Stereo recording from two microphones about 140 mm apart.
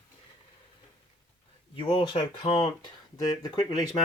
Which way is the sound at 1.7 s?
35° left (ahead or behind).